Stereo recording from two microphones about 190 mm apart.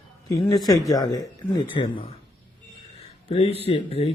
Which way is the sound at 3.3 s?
30° left (ahead or behind).